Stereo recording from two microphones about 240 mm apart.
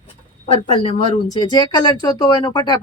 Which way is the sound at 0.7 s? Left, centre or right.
Left.